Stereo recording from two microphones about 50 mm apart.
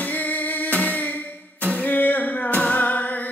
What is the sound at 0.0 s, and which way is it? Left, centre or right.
Music, left.